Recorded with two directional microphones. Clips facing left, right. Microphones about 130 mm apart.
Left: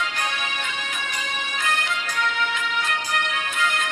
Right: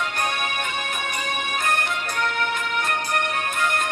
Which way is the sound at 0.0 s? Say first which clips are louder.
Right 2 dB; 50° right (ahead or behind).